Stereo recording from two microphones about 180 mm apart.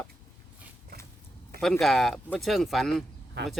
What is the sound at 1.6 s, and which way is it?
Speech, centre (ahead or behind).